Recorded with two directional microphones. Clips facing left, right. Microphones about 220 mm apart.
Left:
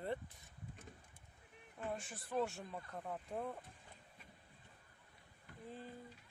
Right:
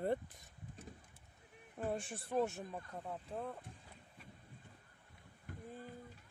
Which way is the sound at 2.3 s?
15° right (ahead or behind).